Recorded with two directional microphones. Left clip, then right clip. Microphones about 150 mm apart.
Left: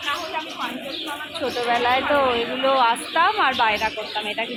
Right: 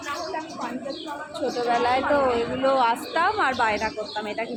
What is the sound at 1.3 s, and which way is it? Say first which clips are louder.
A woman's voice: left 1 dB; centre (ahead or behind).